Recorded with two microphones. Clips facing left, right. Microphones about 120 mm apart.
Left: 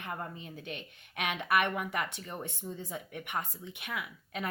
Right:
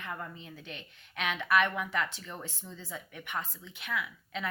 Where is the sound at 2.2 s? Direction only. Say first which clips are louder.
Left 3 dB; 20° left (ahead or behind).